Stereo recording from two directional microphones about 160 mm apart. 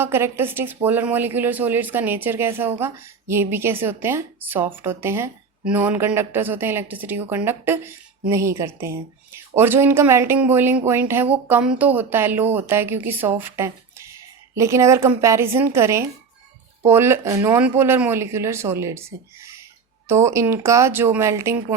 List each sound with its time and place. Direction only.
0.0 s speech: 15° right (ahead or behind)